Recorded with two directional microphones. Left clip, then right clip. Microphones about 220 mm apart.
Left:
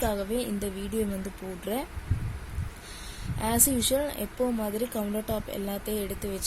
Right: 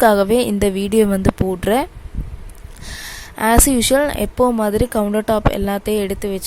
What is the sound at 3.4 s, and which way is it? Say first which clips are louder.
A woman's voice: right 13 dB; 40° right (ahead or behind).